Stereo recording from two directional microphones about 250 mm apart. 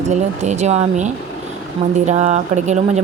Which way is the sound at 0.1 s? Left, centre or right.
Right.